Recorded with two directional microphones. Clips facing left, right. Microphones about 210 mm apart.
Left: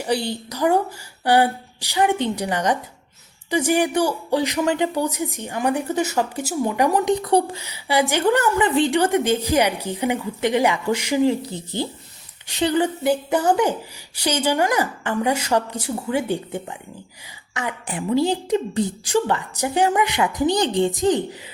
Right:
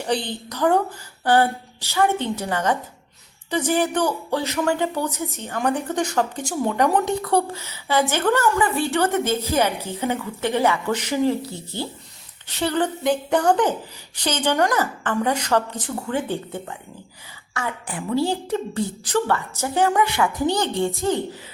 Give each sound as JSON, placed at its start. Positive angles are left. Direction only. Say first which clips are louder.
{"t": 0.0, "sound": "a woman's voice", "louder": "left 2 dB", "side_deg": 10}